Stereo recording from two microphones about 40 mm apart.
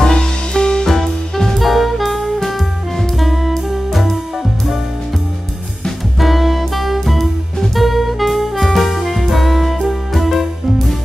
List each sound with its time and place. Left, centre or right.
0.0 s music: centre
0.8 s music: centre
6.1 s music: centre